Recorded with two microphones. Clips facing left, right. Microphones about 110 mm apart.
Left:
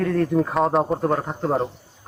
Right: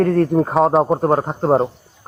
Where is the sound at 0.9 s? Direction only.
40° right (ahead or behind).